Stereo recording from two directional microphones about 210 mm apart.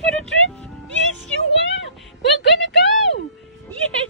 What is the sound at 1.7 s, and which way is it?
Cat, 60° left (ahead or behind).